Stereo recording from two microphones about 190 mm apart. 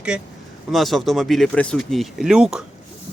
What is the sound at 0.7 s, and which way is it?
Speech, centre (ahead or behind).